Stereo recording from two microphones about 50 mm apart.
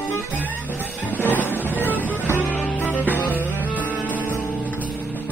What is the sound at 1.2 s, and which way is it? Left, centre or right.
Music, left.